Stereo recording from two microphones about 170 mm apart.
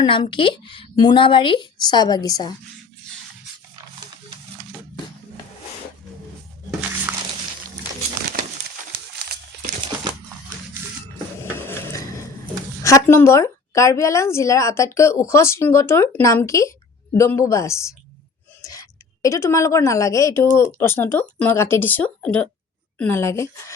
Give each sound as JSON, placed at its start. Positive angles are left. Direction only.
{"t": 0.0, "sound": "a woman's voice", "side_deg": 25}
{"t": 11.4, "sound": "a sound", "side_deg": 15}
{"t": 12.8, "sound": "a woman's voice", "side_deg": 15}